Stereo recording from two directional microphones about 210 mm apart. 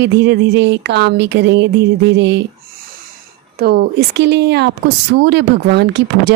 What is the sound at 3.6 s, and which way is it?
A woman's voice, 50° right (ahead or behind).